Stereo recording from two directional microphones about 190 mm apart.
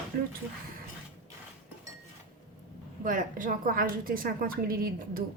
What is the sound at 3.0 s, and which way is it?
A woman's voice, 45° right (ahead or behind).